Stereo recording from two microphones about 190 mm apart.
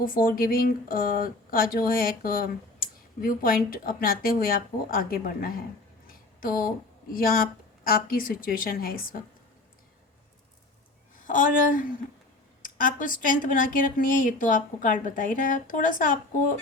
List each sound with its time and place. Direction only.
0.0 s speech: 50° left (ahead or behind)
6.1 s a sound: 45° left (ahead or behind)
7.9 s speech: 50° left (ahead or behind)
11.3 s speech: 45° left (ahead or behind)